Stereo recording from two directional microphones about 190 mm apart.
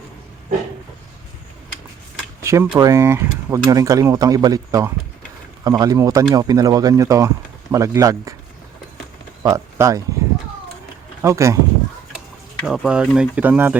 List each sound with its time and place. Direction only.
2.4 s a sound: 15° right (ahead or behind)
2.7 s speech: 15° right (ahead or behind)
9.4 s speech: 15° right (ahead or behind)
11.2 s speech: 15° right (ahead or behind)
12.6 s speech: 5° right (ahead or behind)